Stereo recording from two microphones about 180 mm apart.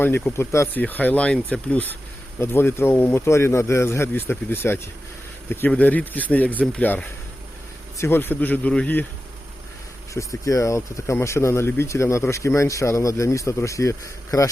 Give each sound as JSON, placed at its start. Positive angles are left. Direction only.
{"t": 0.0, "sound": "speech", "side_deg": 15}
{"t": 10.2, "sound": "speech", "side_deg": 15}